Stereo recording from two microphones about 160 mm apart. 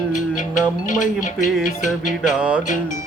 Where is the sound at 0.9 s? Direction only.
50° left (ahead or behind).